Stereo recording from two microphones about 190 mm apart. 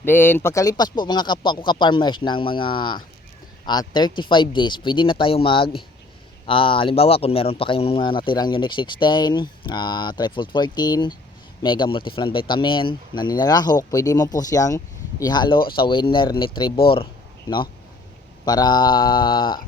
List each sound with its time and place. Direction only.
0.0 s speech: 10° left (ahead or behind)
18.4 s speech: 20° left (ahead or behind)